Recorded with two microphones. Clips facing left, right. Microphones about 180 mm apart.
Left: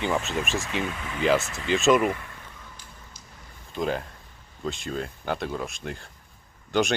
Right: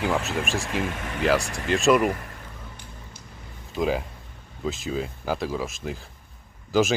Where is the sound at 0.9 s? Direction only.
50° right (ahead or behind).